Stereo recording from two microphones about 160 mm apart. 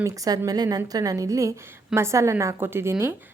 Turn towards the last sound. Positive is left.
turn(degrees=-15)  # may be behind; listen again after turning